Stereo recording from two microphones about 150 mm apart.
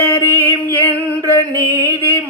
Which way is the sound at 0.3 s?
15° left (ahead or behind).